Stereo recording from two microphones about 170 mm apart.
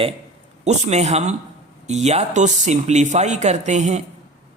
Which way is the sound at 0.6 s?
40° right (ahead or behind).